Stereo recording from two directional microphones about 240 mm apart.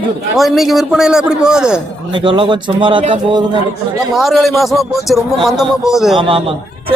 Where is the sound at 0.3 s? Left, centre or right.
Centre.